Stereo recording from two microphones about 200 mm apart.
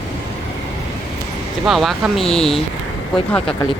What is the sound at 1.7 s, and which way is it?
Speech, centre (ahead or behind).